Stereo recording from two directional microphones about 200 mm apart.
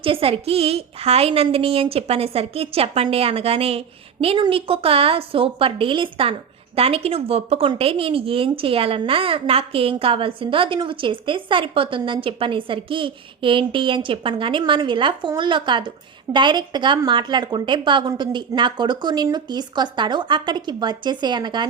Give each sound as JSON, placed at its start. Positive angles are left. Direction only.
{"t": 0.0, "sound": "a woman's voice", "side_deg": -25}